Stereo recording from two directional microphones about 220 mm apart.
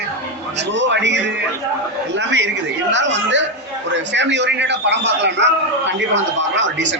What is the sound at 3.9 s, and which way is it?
A man's voice, 55° right (ahead or behind).